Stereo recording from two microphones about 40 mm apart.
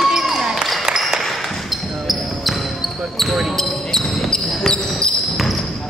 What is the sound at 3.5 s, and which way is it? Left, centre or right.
Basketball bounce, centre.